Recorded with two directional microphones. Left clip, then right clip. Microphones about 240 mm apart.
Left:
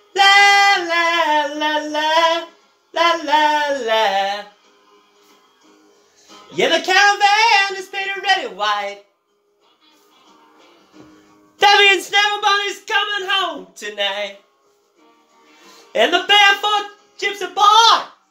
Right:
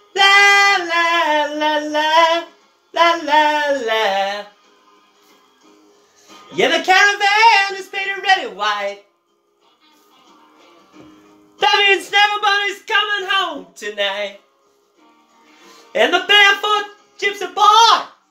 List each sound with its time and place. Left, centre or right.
0.1 s singing: centre
2.9 s a sound: centre
6.5 s a sound: centre
11.5 s music: left
12.1 s speech: centre
15.9 s speech: centre